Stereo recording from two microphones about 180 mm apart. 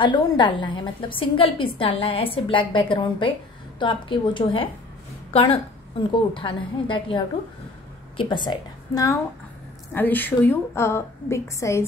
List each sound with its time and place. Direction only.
0.0 s a woman's voice: 25° left (ahead or behind)